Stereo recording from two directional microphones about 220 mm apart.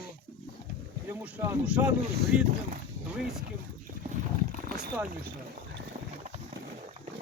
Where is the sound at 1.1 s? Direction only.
10° right (ahead or behind).